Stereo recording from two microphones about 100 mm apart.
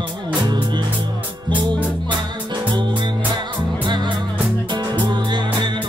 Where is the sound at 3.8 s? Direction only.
50° right (ahead or behind).